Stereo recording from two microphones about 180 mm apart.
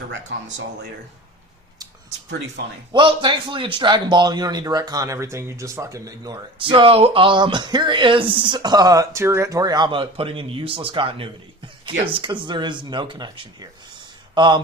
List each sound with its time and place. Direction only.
2.9 s a man's voice: 25° right (ahead or behind)